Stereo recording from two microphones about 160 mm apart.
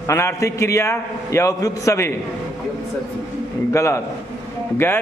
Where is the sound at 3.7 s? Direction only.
15° left (ahead or behind).